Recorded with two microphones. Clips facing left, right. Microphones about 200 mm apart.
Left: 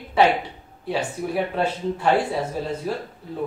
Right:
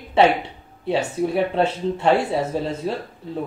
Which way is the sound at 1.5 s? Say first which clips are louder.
Right 3 dB; 25° right (ahead or behind).